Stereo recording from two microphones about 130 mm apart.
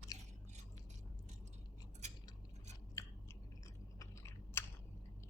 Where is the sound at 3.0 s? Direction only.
25° left (ahead or behind).